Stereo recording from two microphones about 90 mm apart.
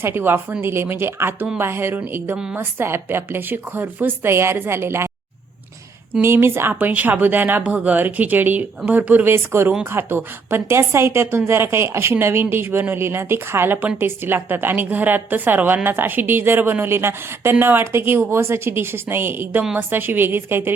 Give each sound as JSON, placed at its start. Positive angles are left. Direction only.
{"t": 0.0, "sound": "a woman's voice", "side_deg": -25}
{"t": 6.2, "sound": "a woman's voice", "side_deg": -25}